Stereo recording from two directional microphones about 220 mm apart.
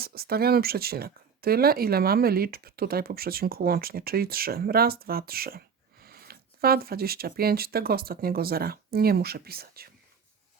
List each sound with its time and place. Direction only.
0.0 s speech: 45° right (ahead or behind)